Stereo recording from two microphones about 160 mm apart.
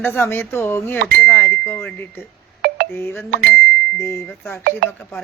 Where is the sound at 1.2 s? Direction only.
10° left (ahead or behind).